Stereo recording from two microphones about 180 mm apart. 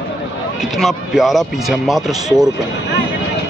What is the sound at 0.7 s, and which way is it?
Speech, centre (ahead or behind).